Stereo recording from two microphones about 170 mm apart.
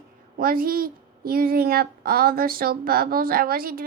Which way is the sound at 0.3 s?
60° right (ahead or behind).